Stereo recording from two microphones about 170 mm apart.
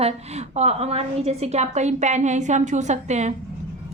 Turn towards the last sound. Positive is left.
turn(degrees=-40)  # may be behind; listen again after turning